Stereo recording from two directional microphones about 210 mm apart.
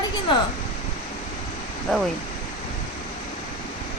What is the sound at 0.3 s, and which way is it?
Speech, 25° left (ahead or behind).